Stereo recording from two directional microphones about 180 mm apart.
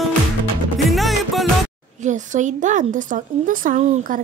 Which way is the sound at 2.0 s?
45° right (ahead or behind).